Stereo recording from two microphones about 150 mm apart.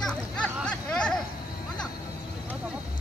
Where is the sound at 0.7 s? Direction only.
5° left (ahead or behind).